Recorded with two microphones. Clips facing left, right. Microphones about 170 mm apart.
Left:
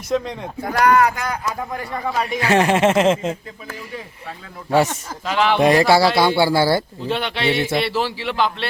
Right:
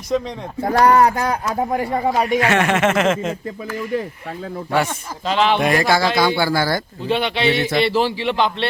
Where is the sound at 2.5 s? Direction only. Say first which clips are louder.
Left 2 dB; 30° left (ahead or behind).